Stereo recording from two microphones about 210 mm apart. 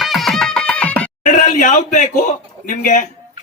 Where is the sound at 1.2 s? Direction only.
35° left (ahead or behind).